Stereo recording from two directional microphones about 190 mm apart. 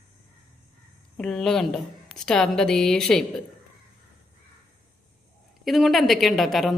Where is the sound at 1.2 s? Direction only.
5° left (ahead or behind).